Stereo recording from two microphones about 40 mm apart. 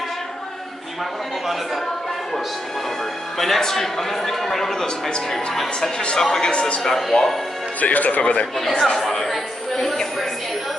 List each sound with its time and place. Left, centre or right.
3.3 s a man's voice: centre
7.8 s speech: left
8.2 s speech: left
8.7 s a man's voice: centre
9.0 s speech: centre